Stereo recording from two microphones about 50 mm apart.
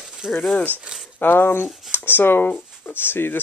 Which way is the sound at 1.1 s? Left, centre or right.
Left.